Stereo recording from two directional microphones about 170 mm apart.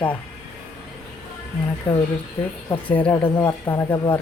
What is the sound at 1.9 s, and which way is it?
Speech, 15° left (ahead or behind).